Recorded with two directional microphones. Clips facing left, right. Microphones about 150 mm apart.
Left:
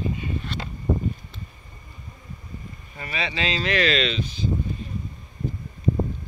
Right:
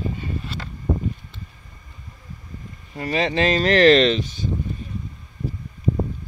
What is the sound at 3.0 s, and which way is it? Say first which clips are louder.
Speech: right 8 dB; 40° right (ahead or behind).